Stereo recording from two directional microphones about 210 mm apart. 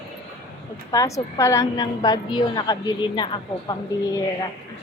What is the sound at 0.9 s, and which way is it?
A woman's voice, 15° left (ahead or behind).